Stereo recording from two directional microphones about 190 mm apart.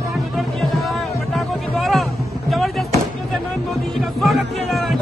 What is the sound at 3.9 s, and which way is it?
Music, centre (ahead or behind).